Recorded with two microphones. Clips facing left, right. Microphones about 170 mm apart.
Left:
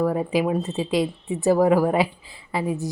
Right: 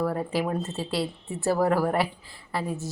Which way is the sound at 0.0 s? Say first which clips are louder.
Left 5 dB; 15° left (ahead or behind).